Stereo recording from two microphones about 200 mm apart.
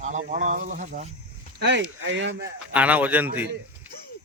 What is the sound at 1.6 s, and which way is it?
Speech, 65° right (ahead or behind).